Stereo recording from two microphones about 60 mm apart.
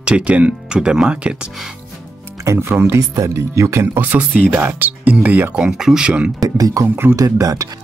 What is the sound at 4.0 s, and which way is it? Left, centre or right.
Speech, right.